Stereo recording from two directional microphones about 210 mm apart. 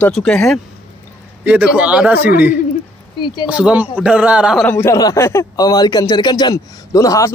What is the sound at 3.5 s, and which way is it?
Speech, 5° right (ahead or behind).